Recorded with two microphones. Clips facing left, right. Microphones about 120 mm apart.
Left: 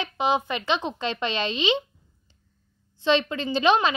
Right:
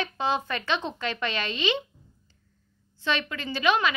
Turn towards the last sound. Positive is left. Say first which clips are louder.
# left 4 dB
turn(degrees=25)  # may be behind; listen again after turning